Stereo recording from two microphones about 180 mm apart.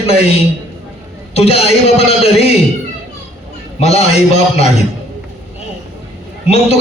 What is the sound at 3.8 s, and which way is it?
A man's voice, 35° left (ahead or behind).